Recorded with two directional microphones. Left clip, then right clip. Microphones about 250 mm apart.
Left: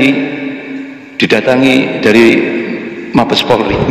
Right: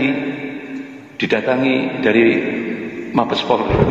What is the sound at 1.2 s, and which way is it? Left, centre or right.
A man's voice, left.